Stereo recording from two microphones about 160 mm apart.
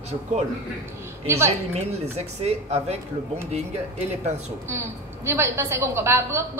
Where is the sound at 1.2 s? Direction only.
15° right (ahead or behind).